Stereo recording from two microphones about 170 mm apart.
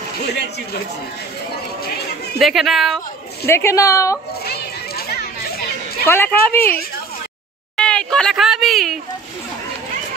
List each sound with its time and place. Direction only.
2.3 s speech: centre (ahead or behind)
3.4 s a woman's voice: 15° left (ahead or behind)
4.5 s children playing: 65° left (ahead or behind)
6.0 s a woman's voice: 15° left (ahead or behind)